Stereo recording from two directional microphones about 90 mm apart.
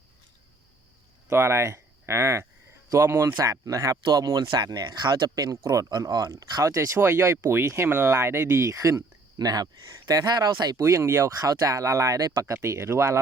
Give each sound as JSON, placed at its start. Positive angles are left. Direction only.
{"t": 1.3, "sound": "speech", "side_deg": -25}
{"t": 10.8, "sound": "speech", "side_deg": -35}